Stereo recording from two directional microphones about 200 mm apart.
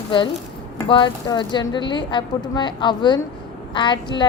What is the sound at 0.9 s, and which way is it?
A woman's voice, 25° left (ahead or behind).